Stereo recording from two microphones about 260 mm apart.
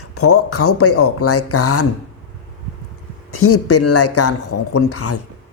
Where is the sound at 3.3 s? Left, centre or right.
Left.